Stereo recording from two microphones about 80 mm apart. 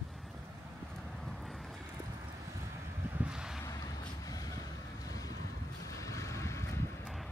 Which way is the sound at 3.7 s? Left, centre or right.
Left.